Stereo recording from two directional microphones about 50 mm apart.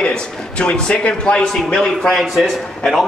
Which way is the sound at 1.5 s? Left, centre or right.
Centre.